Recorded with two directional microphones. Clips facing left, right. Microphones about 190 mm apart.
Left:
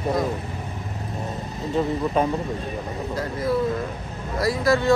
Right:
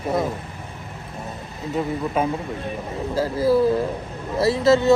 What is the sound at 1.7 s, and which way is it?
Speech, 5° right (ahead or behind).